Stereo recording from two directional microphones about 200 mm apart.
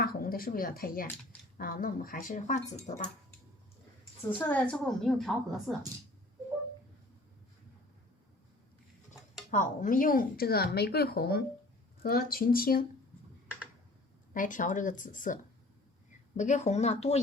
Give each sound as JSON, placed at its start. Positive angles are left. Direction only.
{"t": 0.0, "sound": "speech", "side_deg": 45}
{"t": 4.4, "sound": "a woman's voice", "side_deg": 5}
{"t": 9.5, "sound": "speech", "side_deg": 40}
{"t": 14.3, "sound": "speech", "side_deg": 40}
{"t": 16.4, "sound": "speech", "side_deg": 35}